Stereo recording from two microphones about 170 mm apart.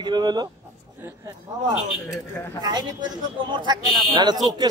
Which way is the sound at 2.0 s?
15° left (ahead or behind).